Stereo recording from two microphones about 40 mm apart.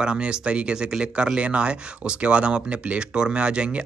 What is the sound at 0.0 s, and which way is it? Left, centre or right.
Speech, right.